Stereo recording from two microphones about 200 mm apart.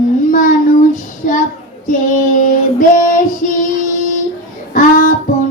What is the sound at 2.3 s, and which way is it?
Child singing, 40° left (ahead or behind).